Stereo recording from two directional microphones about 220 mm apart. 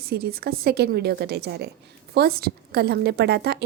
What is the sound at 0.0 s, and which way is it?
A woman's voice, 45° right (ahead or behind).